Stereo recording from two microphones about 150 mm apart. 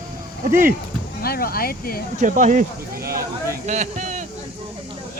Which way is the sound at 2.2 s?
60° right (ahead or behind).